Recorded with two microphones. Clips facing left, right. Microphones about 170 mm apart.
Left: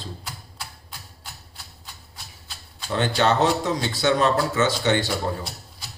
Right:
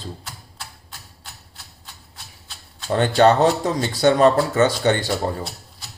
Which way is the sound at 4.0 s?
50° right (ahead or behind).